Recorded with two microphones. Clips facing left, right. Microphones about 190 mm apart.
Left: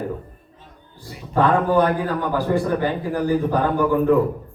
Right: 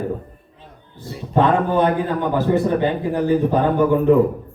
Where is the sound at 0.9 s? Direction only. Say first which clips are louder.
Right 2 dB; 20° right (ahead or behind).